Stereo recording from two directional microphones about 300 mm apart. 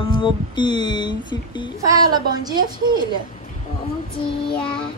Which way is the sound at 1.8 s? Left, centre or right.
Centre.